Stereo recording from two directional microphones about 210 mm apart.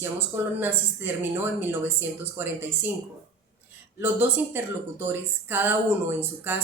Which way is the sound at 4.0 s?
10° right (ahead or behind).